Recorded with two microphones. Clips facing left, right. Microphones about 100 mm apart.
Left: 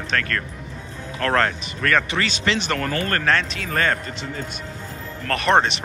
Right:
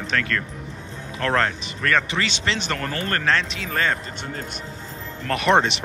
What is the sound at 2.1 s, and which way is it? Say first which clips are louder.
Speech: left 2 dB; 25° right (ahead or behind).